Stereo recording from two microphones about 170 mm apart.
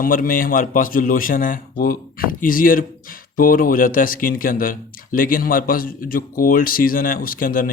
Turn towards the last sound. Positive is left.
turn(degrees=55)  # may be behind; listen again after turning